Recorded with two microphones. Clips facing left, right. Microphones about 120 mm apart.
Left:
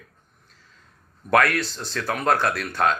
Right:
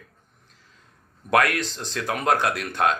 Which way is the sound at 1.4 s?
15° right (ahead or behind).